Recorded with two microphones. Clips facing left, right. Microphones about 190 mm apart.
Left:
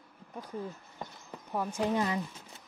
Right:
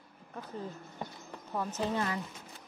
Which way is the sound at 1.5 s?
10° left (ahead or behind).